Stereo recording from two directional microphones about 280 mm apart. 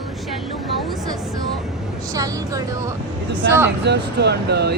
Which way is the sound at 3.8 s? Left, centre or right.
Right.